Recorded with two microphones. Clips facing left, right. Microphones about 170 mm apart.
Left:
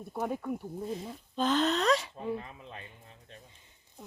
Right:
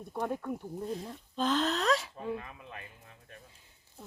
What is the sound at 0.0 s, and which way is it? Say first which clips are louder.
Speech: left 1 dB; 5° left (ahead or behind).